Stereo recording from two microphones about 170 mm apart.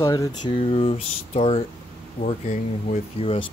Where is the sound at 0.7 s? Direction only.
35° left (ahead or behind).